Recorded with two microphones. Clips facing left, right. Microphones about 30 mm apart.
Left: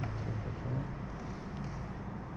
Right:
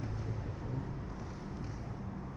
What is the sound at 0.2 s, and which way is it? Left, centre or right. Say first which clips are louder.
Vehicle: left 2 dB; left.